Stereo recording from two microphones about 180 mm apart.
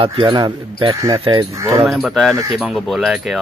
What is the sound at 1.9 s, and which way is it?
Speech, centre (ahead or behind).